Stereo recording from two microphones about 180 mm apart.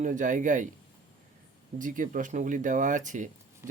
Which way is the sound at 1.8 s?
45° right (ahead or behind).